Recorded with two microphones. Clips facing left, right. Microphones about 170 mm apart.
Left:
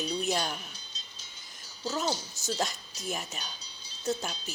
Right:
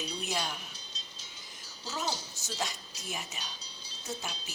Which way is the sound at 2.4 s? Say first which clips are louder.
Left 5 dB; 45° left (ahead or behind).